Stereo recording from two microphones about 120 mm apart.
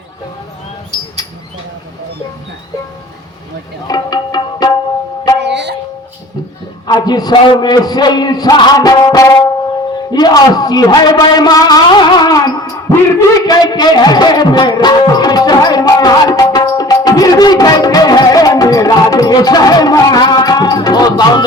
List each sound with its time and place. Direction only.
3.8 s tabla: 35° left (ahead or behind)
6.8 s a man's voice: 35° left (ahead or behind)
12.9 s a sound: 30° left (ahead or behind)